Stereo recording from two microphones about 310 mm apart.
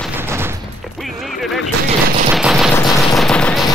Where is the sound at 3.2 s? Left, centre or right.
Centre.